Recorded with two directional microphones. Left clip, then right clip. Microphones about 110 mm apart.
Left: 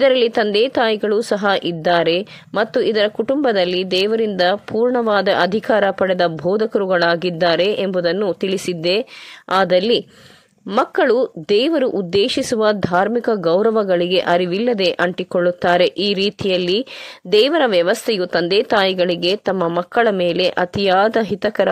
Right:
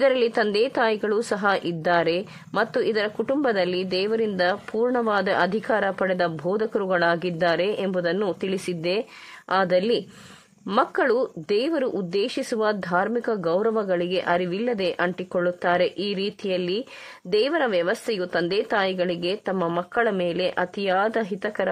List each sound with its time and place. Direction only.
0.0 s a woman's voice: 25° left (ahead or behind)
19.8 s a woman's voice: 35° left (ahead or behind)